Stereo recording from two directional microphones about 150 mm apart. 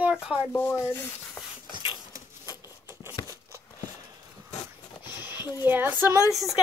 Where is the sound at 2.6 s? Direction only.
15° right (ahead or behind).